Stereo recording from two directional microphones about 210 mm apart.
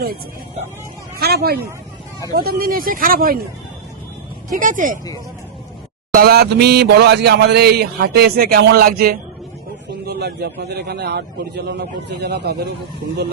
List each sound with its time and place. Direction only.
1.2 s speech: 50° right (ahead or behind)
4.5 s speech: 40° right (ahead or behind)
6.1 s speech: 50° right (ahead or behind)